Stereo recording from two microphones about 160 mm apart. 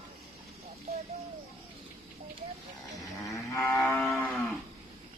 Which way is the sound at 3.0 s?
20° left (ahead or behind).